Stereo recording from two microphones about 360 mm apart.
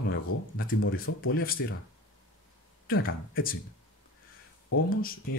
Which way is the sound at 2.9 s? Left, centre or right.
Left.